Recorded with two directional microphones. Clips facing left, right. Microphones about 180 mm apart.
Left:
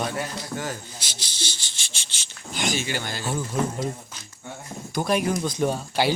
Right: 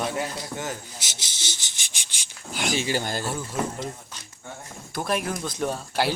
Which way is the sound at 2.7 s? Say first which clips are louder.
Right 3 dB; 35° right (ahead or behind).